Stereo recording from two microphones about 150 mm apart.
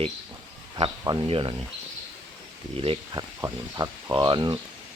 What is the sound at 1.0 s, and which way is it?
Speech, 30° right (ahead or behind).